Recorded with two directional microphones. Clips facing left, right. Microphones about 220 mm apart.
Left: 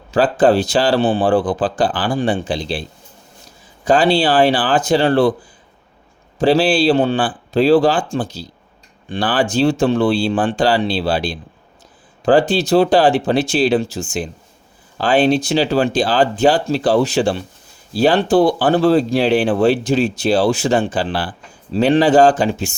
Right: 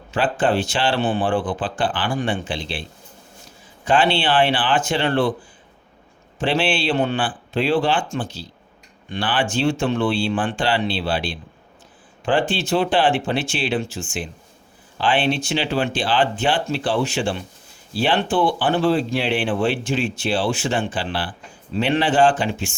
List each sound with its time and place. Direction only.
0.1 s speech: 40° left (ahead or behind)
3.8 s speech: 40° left (ahead or behind)
6.4 s speech: 35° left (ahead or behind)